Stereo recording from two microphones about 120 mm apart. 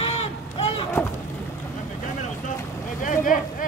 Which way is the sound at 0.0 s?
55° left (ahead or behind).